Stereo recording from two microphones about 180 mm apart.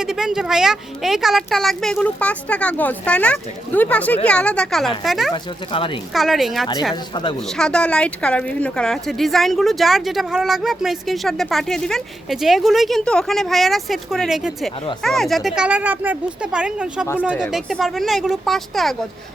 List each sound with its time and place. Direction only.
0.0 s speech: 5° right (ahead or behind)
5.3 s speech: 30° left (ahead or behind)
6.1 s speech: centre (ahead or behind)
6.9 s speech: 25° left (ahead or behind)
7.5 s speech: 5° left (ahead or behind)